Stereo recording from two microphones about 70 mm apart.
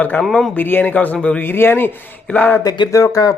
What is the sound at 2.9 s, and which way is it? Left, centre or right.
Speech, left.